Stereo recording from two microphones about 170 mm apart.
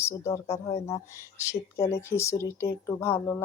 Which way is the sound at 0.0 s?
15° left (ahead or behind).